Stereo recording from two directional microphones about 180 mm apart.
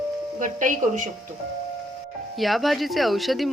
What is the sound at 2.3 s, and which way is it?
Speech, centre (ahead or behind).